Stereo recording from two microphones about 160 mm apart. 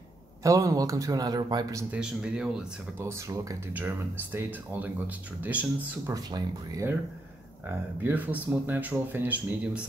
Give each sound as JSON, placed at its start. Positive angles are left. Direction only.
{"t": 0.4, "sound": "a man's voice", "side_deg": -20}
{"t": 2.0, "sound": "speech", "side_deg": -5}
{"t": 3.0, "sound": "speech", "side_deg": -15}
{"t": 6.1, "sound": "a man's voice", "side_deg": -20}
{"t": 8.0, "sound": "speech", "side_deg": -10}